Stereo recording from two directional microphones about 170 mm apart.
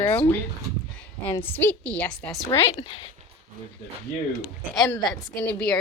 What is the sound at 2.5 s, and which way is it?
Speech, 30° left (ahead or behind).